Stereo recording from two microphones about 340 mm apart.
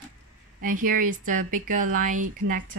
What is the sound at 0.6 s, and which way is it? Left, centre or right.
A woman's voice, right.